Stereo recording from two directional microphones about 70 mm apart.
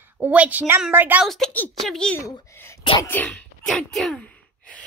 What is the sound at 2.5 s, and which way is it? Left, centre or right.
Sneeze, left.